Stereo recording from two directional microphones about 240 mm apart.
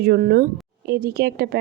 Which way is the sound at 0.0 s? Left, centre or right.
Right.